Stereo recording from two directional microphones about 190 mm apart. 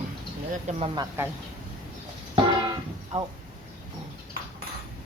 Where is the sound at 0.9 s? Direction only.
10° right (ahead or behind).